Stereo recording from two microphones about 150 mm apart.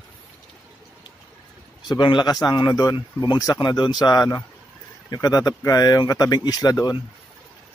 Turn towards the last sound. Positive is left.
turn(degrees=25)  # may be behind; listen again after turning